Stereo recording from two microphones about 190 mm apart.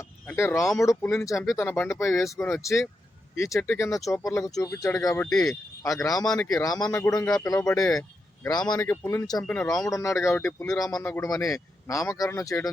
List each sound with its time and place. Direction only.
0.0 s a sound: 10° left (ahead or behind)
0.8 s speech: 15° left (ahead or behind)
5.8 s speech: 15° left (ahead or behind)
6.1 s speech: centre (ahead or behind)
6.6 s speech: 20° left (ahead or behind)
6.8 s speech: 5° left (ahead or behind)
7.1 s speech: 20° left (ahead or behind)
7.8 s speech: 5° left (ahead or behind); by 9.4 s 20° left (ahead or behind)
9.4 s speech: 5° left (ahead or behind)
9.9 s speech: 15° left (ahead or behind)